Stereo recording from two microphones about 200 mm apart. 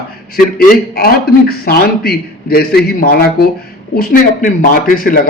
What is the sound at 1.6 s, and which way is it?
A man's voice, 50° left (ahead or behind).